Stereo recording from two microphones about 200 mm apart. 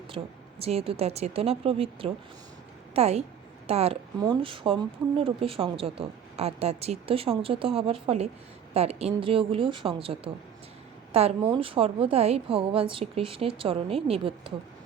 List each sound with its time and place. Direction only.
0.6 s a woman's voice: 30° right (ahead or behind)